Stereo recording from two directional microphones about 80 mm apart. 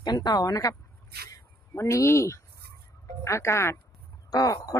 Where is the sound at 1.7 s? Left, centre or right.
Left.